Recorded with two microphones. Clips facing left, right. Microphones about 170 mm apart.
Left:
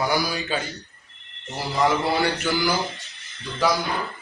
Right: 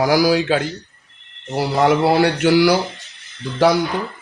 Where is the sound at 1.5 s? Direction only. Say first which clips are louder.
Right 6 dB; 70° right (ahead or behind).